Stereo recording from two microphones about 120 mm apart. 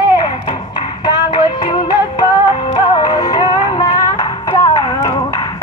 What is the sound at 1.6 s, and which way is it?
Music, 40° left (ahead or behind).